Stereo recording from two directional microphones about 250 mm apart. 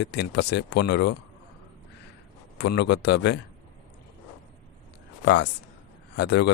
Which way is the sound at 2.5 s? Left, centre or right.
Left.